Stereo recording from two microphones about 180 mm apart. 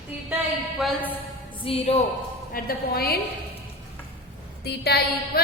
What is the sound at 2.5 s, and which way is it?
Speech, 55° left (ahead or behind).